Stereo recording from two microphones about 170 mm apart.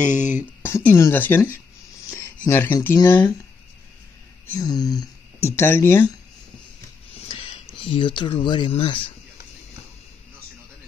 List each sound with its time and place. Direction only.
0.1 s speech: 10° right (ahead or behind)
0.6 s speech: 15° left (ahead or behind)
4.5 s speech: 20° left (ahead or behind)
7.2 s speech: 35° left (ahead or behind)